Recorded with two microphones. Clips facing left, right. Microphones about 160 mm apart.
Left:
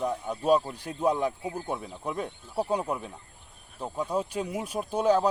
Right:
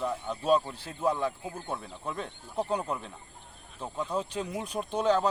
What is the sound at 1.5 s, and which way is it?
Speech, 5° left (ahead or behind).